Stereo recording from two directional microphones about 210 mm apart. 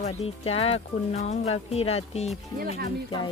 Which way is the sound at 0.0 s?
30° left (ahead or behind).